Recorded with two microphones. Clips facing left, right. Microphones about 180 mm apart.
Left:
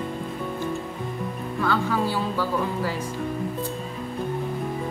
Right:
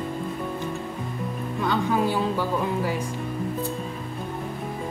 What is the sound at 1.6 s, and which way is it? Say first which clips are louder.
Speech: right 1 dB; 20° right (ahead or behind).